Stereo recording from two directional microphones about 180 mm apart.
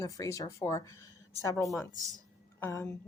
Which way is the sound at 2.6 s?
15° left (ahead or behind).